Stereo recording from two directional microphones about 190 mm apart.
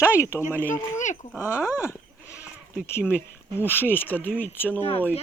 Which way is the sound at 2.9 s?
10° left (ahead or behind).